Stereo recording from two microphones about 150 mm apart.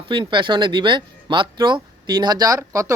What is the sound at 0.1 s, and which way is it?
Speech, 30° right (ahead or behind).